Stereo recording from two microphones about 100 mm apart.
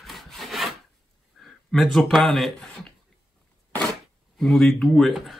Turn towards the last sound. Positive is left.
turn(degrees=0)  # may be behind; listen again after turning